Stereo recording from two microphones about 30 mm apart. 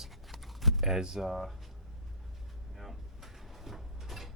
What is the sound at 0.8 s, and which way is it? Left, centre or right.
Speech, centre.